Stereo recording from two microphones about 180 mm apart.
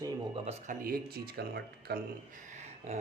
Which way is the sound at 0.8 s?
55° right (ahead or behind).